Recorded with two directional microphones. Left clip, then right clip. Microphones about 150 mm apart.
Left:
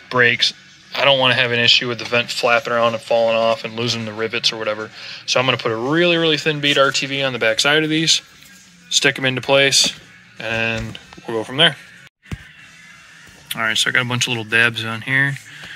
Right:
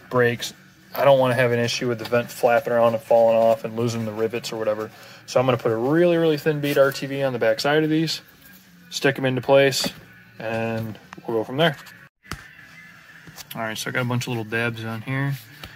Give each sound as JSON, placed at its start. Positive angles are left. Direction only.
{"t": 0.1, "sound": "speech", "side_deg": -15}
{"t": 2.4, "sound": "speech", "side_deg": -10}
{"t": 5.0, "sound": "speech", "side_deg": -20}
{"t": 5.7, "sound": "speech", "side_deg": 0}
{"t": 13.5, "sound": "speech", "side_deg": 0}